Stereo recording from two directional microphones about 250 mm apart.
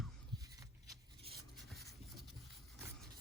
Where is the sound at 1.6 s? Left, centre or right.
Centre.